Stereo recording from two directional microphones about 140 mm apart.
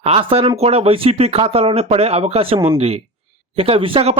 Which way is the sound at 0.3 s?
45° right (ahead or behind).